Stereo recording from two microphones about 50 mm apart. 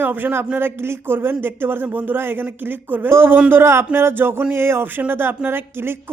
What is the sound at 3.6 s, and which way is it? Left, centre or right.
Speech, right.